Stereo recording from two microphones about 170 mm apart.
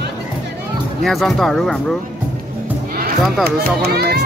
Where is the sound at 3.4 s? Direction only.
65° right (ahead or behind).